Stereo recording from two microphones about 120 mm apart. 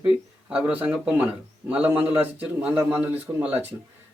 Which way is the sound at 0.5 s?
10° right (ahead or behind).